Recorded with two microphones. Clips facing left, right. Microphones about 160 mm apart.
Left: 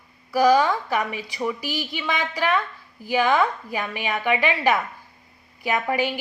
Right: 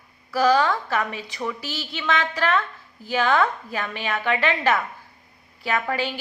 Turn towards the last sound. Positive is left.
turn(degrees=15)  # may be behind; listen again after turning